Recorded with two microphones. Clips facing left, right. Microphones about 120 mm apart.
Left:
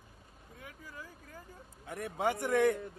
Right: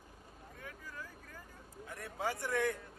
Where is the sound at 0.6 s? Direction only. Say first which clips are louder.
Even; 15° left (ahead or behind).